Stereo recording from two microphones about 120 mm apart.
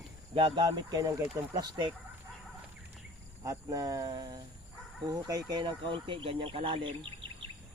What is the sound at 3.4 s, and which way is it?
Speech, 30° right (ahead or behind).